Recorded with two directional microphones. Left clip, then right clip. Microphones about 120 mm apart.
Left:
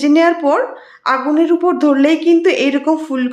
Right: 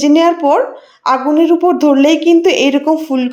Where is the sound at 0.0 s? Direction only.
20° right (ahead or behind).